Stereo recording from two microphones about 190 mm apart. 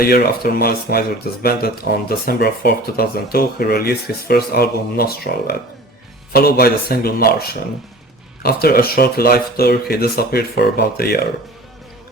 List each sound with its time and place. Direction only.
0.0 s speech: 55° left (ahead or behind)